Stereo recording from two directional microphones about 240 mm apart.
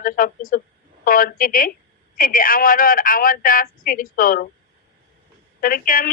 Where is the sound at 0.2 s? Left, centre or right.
Left.